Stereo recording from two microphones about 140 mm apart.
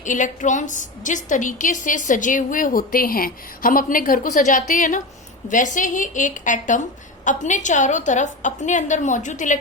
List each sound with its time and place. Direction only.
0.0 s a woman's voice: 65° left (ahead or behind)